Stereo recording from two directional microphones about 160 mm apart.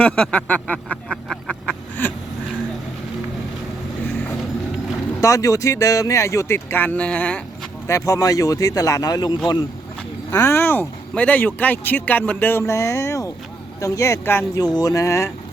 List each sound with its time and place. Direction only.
0.0 s a sound: 10° left (ahead or behind)
5.2 s speech: 20° left (ahead or behind)
7.9 s speech: 20° left (ahead or behind)
10.3 s speech: 15° left (ahead or behind)